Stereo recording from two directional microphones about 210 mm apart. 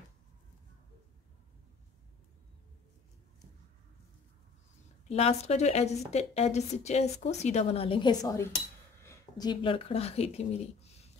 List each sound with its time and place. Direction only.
5.0 s speech: 30° left (ahead or behind)